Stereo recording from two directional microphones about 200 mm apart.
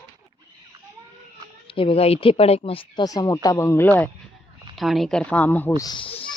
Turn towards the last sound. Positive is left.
turn(degrees=25)  # may be behind; listen again after turning